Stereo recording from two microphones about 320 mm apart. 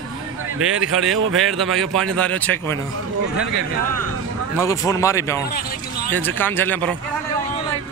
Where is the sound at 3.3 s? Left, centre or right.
Right.